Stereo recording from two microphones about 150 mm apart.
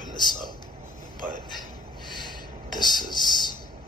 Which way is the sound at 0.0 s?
30° left (ahead or behind).